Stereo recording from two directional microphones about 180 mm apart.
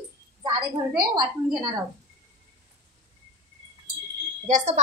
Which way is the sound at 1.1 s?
25° right (ahead or behind).